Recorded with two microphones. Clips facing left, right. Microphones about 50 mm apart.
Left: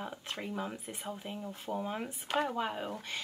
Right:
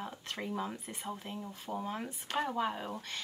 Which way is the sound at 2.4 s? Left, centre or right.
Centre.